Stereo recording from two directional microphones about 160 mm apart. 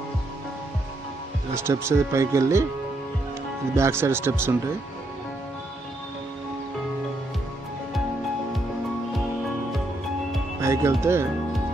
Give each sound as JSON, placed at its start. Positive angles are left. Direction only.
{"t": 1.5, "sound": "speech", "side_deg": -15}
{"t": 3.7, "sound": "speech", "side_deg": -15}
{"t": 10.6, "sound": "speech", "side_deg": -15}